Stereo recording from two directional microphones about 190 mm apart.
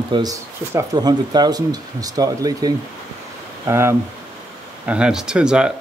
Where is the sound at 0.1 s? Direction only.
20° right (ahead or behind).